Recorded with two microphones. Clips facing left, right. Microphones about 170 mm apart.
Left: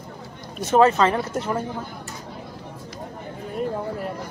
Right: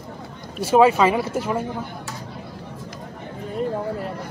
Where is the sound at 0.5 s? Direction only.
10° right (ahead or behind).